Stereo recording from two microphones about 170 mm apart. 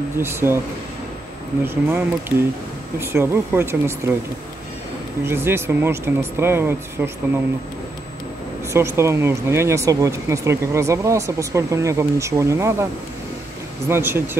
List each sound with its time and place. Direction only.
0.2 s speech: 15° right (ahead or behind)
1.9 s speech: 10° right (ahead or behind)
5.2 s speech: 15° right (ahead or behind)
8.7 s speech: 15° right (ahead or behind)
13.8 s speech: 15° right (ahead or behind)